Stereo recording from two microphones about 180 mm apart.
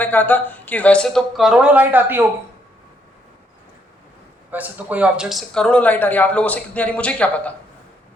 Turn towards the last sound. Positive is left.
turn(degrees=5)  # may be behind; listen again after turning